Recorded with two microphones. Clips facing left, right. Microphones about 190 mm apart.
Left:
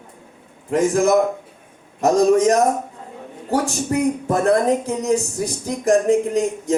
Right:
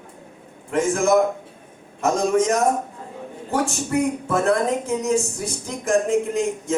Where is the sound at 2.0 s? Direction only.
35° left (ahead or behind).